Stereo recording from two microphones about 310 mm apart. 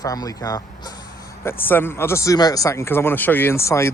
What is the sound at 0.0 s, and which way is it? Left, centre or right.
Speech, centre.